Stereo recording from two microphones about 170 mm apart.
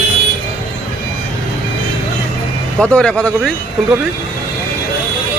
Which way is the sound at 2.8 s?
5° left (ahead or behind).